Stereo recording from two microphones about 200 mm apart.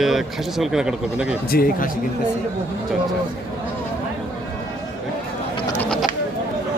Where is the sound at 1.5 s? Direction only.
45° left (ahead or behind).